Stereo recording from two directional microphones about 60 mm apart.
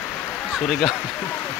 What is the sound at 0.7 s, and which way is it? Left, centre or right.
Speech, centre.